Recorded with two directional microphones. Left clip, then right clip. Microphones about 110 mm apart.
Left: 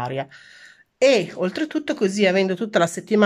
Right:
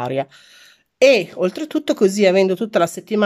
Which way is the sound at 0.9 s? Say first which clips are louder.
Right 4 dB; 20° right (ahead or behind).